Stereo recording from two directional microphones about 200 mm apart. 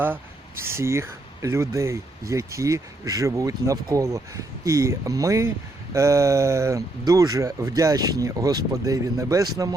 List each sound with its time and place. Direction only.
0.6 s speech: 10° right (ahead or behind)